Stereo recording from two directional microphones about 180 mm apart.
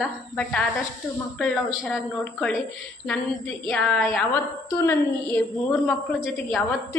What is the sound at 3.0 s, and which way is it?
A woman's voice, 5° left (ahead or behind).